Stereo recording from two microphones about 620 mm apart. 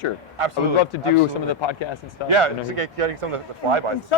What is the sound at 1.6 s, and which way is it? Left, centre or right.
Speech, left.